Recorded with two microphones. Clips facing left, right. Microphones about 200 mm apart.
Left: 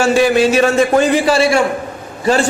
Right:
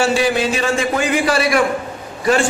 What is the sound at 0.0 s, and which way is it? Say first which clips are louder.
A man's voice: left 5 dB; 45° left (ahead or behind).